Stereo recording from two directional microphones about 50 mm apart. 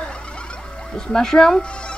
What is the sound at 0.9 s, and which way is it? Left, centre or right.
Speech, centre.